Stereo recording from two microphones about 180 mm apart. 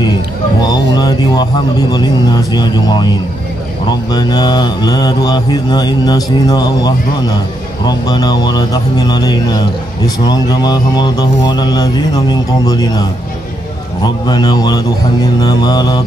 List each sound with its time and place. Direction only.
0.6 s speech: 20° left (ahead or behind)
4.1 s speech: 25° left (ahead or behind)
14.0 s speech: 25° left (ahead or behind)